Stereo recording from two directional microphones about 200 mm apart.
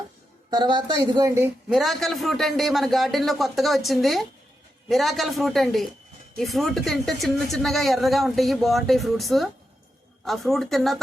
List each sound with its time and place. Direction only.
0.5 s speech: 20° right (ahead or behind)
1.7 s a man's voice: centre (ahead or behind)